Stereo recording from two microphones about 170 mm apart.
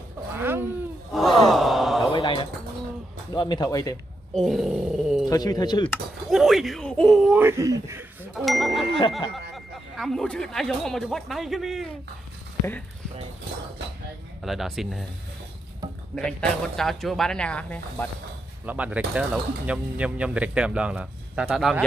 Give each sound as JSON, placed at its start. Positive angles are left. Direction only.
{"t": 0.4, "sound": "a sound", "side_deg": -15}
{"t": 1.1, "sound": "a sound", "side_deg": 0}
{"t": 2.0, "sound": "a sound", "side_deg": 30}
{"t": 3.3, "sound": "speech", "side_deg": 25}
{"t": 4.3, "sound": "speech", "side_deg": 0}
{"t": 5.3, "sound": "speech", "side_deg": 20}
{"t": 6.3, "sound": "speech", "side_deg": 0}
{"t": 8.4, "sound": "speech", "side_deg": 0}
{"t": 14.4, "sound": "speech", "side_deg": 0}
{"t": 16.2, "sound": "speech", "side_deg": 5}
{"t": 18.7, "sound": "speech", "side_deg": -10}